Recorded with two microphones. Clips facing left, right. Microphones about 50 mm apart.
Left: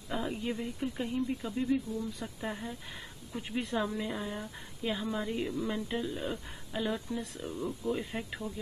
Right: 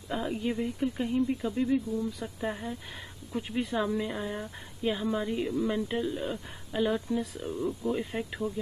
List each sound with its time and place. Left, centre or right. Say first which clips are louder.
0.1 s a sound: right 3 dB; centre
0.4 s speech: right 5 dB; centre
6.7 s speech: right 6 dB; centre
7.2 s speech: right 5 dB; centre